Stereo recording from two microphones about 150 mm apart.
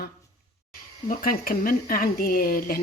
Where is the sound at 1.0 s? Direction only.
70° left (ahead or behind).